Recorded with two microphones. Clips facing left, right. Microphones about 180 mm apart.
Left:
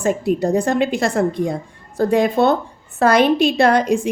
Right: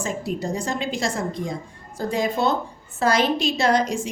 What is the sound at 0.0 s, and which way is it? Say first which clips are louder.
Speech: left 9 dB; 60° left (ahead or behind).